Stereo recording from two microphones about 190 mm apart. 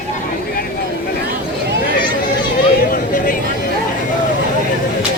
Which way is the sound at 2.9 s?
45° left (ahead or behind).